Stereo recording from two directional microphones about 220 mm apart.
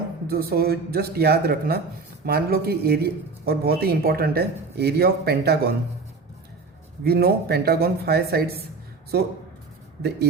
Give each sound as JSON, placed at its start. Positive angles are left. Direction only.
{"t": 0.3, "sound": "a man's voice", "side_deg": -45}
{"t": 7.0, "sound": "a man's voice", "side_deg": -45}